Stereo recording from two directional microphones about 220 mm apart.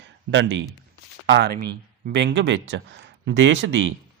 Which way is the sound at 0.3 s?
55° right (ahead or behind).